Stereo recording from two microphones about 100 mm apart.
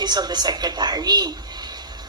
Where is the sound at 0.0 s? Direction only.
45° right (ahead or behind).